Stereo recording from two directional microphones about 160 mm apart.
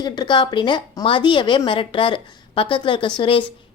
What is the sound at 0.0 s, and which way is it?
A woman's voice, 30° left (ahead or behind).